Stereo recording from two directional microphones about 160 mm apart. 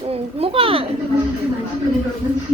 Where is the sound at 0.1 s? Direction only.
35° right (ahead or behind).